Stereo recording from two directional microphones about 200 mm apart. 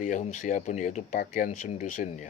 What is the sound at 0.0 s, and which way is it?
Speech, 40° left (ahead or behind).